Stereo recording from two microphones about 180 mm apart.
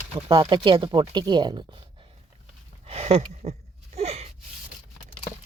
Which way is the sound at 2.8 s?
35° right (ahead or behind).